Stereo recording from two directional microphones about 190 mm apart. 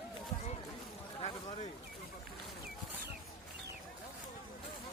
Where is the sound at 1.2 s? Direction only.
25° left (ahead or behind).